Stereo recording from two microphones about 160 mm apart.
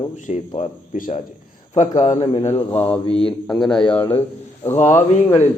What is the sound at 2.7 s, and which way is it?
A man's voice, 10° left (ahead or behind).